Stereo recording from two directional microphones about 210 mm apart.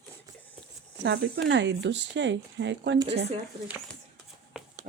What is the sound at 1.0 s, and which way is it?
Speech, 55° right (ahead or behind).